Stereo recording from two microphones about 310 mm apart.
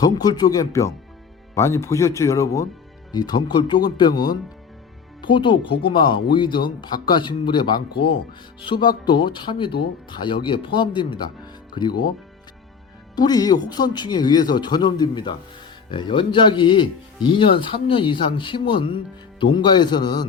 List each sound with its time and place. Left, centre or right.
0.0 s speech: centre
13.1 s speech: centre